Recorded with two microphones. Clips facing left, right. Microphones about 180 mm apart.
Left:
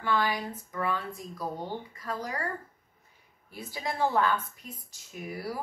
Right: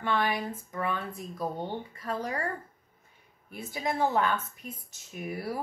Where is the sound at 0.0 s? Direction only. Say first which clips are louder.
Even; 25° right (ahead or behind).